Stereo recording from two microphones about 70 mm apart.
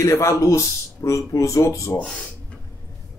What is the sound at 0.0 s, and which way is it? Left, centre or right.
Speech, left.